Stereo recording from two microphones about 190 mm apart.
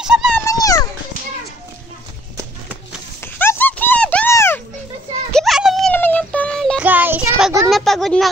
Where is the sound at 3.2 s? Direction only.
10° left (ahead or behind).